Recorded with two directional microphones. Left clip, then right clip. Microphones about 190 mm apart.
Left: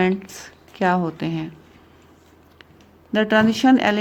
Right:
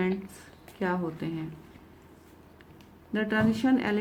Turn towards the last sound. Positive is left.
turn(degrees=50)  # may be behind; listen again after turning